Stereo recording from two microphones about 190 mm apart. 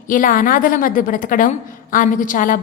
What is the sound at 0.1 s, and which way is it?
A woman's voice, 45° left (ahead or behind).